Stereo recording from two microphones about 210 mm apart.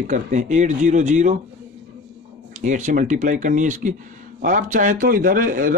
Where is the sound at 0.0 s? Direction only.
35° right (ahead or behind).